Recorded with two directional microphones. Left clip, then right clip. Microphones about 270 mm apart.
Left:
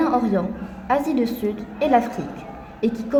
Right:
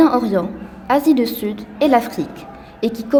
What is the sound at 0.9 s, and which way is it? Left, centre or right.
A woman's voice, right.